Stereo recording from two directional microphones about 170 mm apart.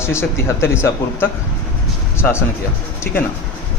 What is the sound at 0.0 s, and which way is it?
Speech, 15° left (ahead or behind).